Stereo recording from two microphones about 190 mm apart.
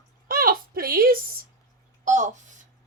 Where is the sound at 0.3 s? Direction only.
50° right (ahead or behind).